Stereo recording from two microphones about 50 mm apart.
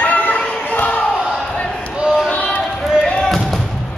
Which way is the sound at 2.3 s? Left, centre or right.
Left.